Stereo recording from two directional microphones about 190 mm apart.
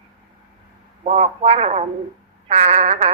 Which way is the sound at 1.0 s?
35° right (ahead or behind).